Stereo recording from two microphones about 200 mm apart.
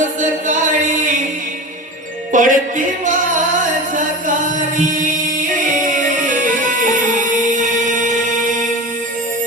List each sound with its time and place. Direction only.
0.0 s music: 40° right (ahead or behind)
2.3 s music: 40° right (ahead or behind)
4.8 s chant: 40° right (ahead or behind)
5.9 s music: 40° right (ahead or behind)